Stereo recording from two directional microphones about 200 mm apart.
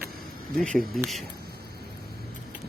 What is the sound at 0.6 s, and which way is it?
Speech, centre (ahead or behind).